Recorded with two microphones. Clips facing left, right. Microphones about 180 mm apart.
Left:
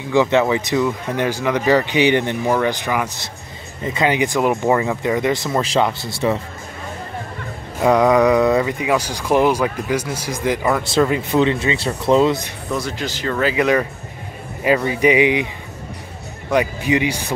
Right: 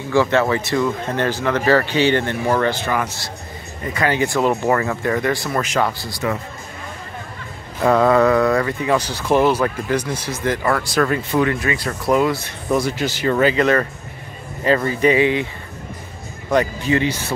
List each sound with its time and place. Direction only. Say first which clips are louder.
0.1 s speech: left 1 dB; 20° left (ahead or behind)
7.8 s speech: left 1 dB; 15° left (ahead or behind)
12.7 s speech: right 4 dB; 10° right (ahead or behind)
13.4 s speech: even; 5° left (ahead or behind)
14.9 s speech: left 1 dB; 15° left (ahead or behind)
16.5 s speech: even; 15° left (ahead or behind)